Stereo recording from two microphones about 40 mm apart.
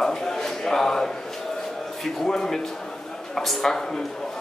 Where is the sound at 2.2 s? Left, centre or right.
Centre.